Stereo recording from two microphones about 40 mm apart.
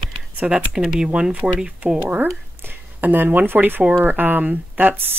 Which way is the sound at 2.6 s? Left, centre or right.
Right.